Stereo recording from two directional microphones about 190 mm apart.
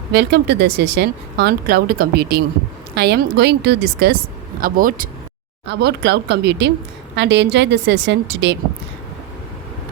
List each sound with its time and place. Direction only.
0.1 s speech: 60° right (ahead or behind)
4.6 s speech: 45° right (ahead or behind)
5.6 s speech: 65° right (ahead or behind)